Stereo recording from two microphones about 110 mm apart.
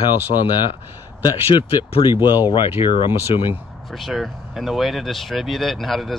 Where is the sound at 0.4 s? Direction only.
45° left (ahead or behind).